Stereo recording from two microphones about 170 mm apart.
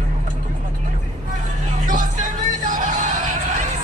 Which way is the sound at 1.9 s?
50° right (ahead or behind).